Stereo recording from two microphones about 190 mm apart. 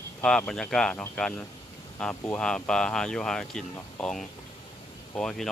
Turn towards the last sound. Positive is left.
turn(degrees=5)  # may be behind; listen again after turning